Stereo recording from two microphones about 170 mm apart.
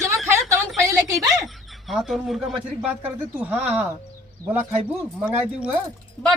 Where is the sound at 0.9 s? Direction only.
20° right (ahead or behind).